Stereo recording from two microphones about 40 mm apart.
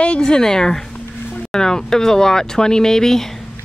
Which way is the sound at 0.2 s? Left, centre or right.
Centre.